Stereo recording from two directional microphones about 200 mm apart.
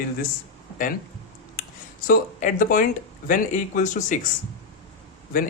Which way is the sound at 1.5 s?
45° left (ahead or behind).